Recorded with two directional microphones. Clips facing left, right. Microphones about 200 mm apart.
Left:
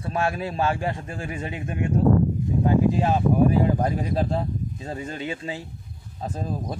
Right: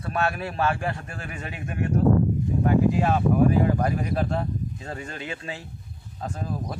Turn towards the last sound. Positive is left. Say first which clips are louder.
# left 2 dB
turn(degrees=20)  # may be behind; listen again after turning